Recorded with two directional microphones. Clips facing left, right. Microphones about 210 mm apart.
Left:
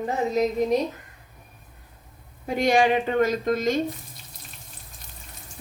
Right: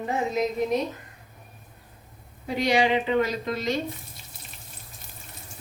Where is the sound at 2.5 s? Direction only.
50° left (ahead or behind).